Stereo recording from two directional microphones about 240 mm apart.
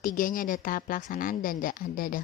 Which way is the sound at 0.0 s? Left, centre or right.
Left.